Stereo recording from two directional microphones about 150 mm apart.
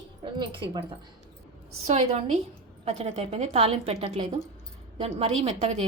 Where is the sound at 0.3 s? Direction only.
30° right (ahead or behind).